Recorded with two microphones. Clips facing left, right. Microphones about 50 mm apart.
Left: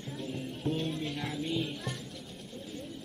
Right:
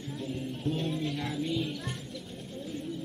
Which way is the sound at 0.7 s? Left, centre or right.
Centre.